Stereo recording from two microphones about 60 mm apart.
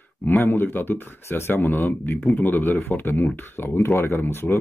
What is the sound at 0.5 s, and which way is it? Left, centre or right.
Speech, left.